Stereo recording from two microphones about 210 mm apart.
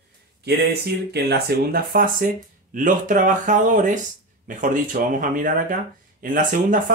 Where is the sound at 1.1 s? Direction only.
50° right (ahead or behind).